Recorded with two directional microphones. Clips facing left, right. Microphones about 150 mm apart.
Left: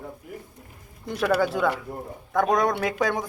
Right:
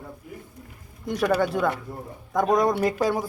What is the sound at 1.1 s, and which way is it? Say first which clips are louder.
Speech: even; centre (ahead or behind).